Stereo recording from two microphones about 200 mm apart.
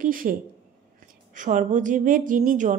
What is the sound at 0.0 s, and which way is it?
A woman's voice, 45° right (ahead or behind).